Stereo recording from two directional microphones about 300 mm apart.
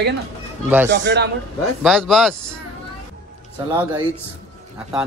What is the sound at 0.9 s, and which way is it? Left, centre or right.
Speech, right.